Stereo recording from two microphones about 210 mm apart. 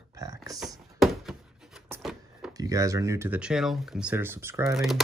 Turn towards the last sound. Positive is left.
turn(degrees=0)  # may be behind; listen again after turning